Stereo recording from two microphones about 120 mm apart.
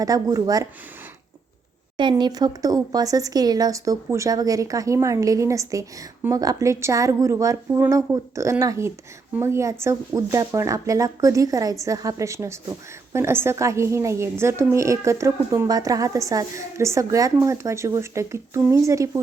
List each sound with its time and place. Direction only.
0.0 s speech: 30° right (ahead or behind)
2.0 s speech: 40° right (ahead or behind)